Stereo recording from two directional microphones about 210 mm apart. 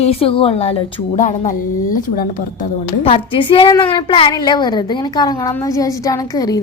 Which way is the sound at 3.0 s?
25° left (ahead or behind).